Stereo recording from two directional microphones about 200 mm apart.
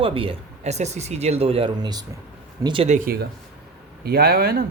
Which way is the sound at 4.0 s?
50° right (ahead or behind).